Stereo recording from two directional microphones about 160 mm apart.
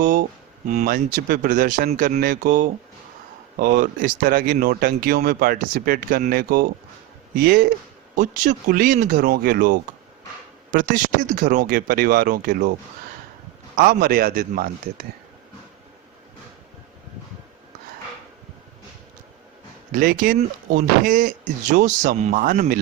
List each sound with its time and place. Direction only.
0.0 s speech: 55° right (ahead or behind)
8.1 s speech: 55° right (ahead or behind)
13.7 s speech: 65° right (ahead or behind)
19.9 s speech: 60° right (ahead or behind)